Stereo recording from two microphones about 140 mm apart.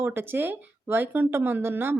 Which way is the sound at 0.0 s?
15° right (ahead or behind).